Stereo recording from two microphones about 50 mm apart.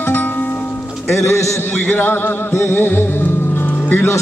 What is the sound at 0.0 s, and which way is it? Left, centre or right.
Music, left.